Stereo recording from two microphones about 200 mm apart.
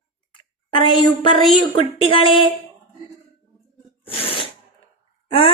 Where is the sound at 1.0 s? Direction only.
25° left (ahead or behind).